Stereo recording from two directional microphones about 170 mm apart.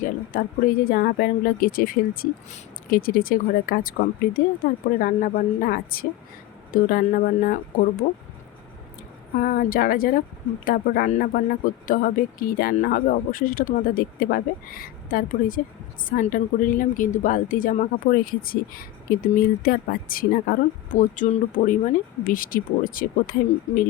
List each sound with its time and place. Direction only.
0.3 s speech: 55° left (ahead or behind)
9.4 s speech: 55° left (ahead or behind)